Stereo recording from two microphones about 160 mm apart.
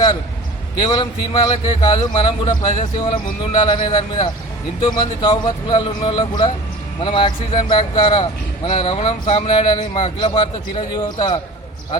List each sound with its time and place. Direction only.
0.8 s a man's voice: 30° left (ahead or behind)